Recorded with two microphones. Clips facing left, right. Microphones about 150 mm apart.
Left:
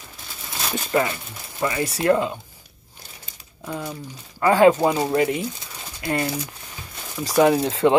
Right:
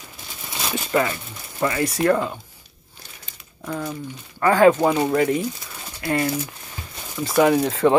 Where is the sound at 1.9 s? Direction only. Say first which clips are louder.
Left 1 dB; 30° left (ahead or behind).